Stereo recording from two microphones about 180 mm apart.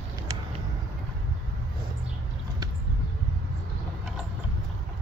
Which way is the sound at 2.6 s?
20° right (ahead or behind).